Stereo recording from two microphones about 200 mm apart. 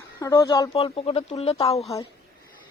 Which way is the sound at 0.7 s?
30° left (ahead or behind).